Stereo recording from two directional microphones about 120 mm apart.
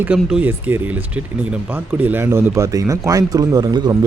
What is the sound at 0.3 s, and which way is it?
Speech, 10° right (ahead or behind).